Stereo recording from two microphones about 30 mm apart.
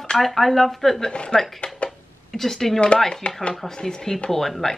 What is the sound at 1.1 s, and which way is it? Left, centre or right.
Speech, left.